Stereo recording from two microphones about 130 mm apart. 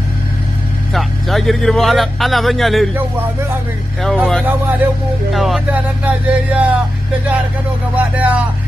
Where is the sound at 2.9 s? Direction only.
15° right (ahead or behind).